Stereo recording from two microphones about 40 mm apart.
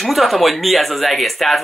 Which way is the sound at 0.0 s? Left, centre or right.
Centre.